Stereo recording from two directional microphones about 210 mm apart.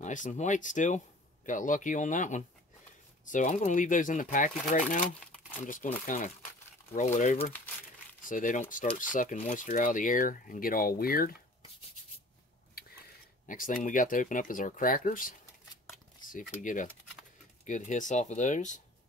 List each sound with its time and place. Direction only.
0.0 s speech: 35° left (ahead or behind)
6.0 s speech: 35° left (ahead or behind)
7.5 s crumpling: 10° left (ahead or behind)
8.3 s speech: 40° left (ahead or behind)
13.5 s speech: 40° left (ahead or behind)